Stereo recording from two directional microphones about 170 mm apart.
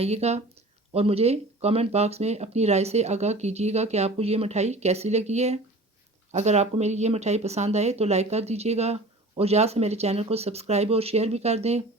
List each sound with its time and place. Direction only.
0.0 s speech: 40° right (ahead or behind)